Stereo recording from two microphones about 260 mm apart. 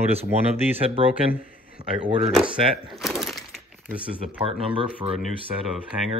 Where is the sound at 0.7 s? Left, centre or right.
Right.